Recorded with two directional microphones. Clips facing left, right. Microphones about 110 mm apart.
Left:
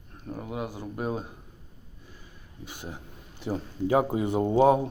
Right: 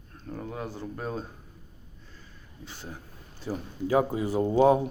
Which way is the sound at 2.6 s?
15° left (ahead or behind).